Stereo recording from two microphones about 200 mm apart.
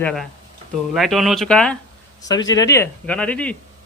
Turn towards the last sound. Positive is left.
turn(degrees=5)  # may be behind; listen again after turning